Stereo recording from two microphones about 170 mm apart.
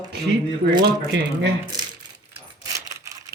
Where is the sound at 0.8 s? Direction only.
80° right.